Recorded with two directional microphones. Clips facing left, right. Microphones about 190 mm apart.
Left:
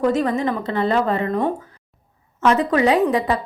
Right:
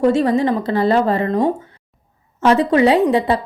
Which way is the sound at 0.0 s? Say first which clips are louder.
Right 4 dB; 30° right (ahead or behind).